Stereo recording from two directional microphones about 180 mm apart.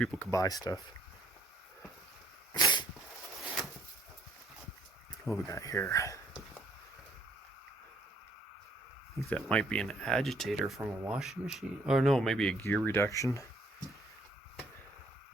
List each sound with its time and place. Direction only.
0.0 s speech: 10° left (ahead or behind)
2.6 s dog: 25° left (ahead or behind)
5.2 s speech: centre (ahead or behind)
5.5 s speech: 15° left (ahead or behind)
9.3 s speech: 5° left (ahead or behind)